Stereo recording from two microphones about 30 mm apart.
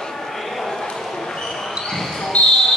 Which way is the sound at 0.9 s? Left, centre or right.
Centre.